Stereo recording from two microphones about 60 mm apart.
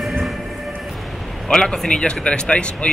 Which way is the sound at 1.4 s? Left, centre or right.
Centre.